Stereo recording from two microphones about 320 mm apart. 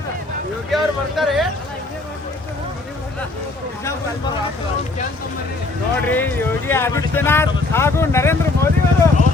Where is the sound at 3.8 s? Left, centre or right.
Centre.